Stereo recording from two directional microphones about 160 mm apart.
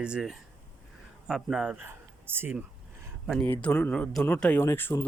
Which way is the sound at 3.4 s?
5° left (ahead or behind).